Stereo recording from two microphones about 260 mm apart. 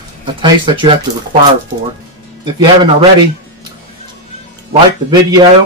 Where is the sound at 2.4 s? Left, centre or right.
Centre.